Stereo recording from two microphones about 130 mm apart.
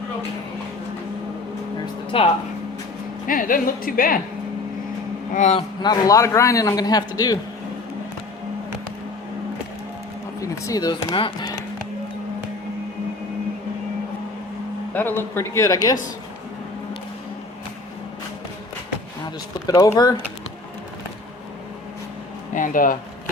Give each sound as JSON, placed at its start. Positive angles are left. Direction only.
{"t": 2.1, "sound": "speech", "side_deg": 45}
{"t": 3.2, "sound": "speech", "side_deg": 90}
{"t": 5.3, "sound": "speech", "side_deg": 70}
{"t": 5.5, "sound": "speech", "side_deg": 30}
{"t": 10.4, "sound": "speech", "side_deg": 30}
{"t": 14.9, "sound": "speech", "side_deg": 15}
{"t": 19.6, "sound": "speech", "side_deg": 25}
{"t": 22.5, "sound": "speech", "side_deg": 90}